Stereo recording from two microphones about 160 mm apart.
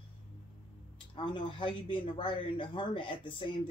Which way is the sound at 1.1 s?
30° left (ahead or behind).